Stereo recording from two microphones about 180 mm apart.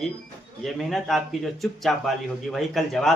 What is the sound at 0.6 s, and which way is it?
Speech, centre (ahead or behind).